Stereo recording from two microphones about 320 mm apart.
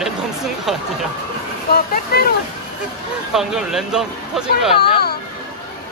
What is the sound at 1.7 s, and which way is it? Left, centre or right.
Speech, left.